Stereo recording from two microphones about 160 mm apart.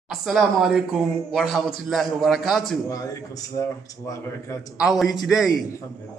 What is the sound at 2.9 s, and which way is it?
Speech, 20° left (ahead or behind).